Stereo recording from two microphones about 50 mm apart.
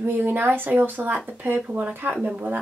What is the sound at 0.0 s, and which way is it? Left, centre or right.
Speech, right.